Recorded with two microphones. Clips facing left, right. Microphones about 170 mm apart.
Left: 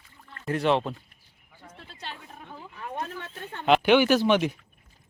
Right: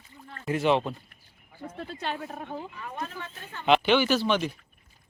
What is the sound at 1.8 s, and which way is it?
Speech, 60° right (ahead or behind).